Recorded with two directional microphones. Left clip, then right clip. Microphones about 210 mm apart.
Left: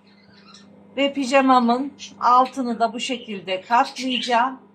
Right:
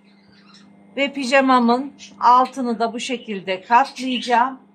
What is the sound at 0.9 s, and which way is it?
A woman's voice, 45° right (ahead or behind).